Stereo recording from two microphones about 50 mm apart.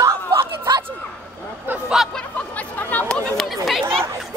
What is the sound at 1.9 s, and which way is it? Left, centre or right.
Snicker, centre.